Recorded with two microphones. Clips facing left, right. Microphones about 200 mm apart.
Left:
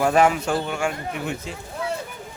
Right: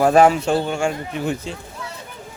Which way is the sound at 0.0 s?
35° right (ahead or behind).